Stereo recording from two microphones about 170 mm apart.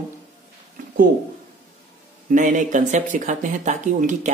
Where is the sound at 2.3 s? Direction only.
50° right (ahead or behind).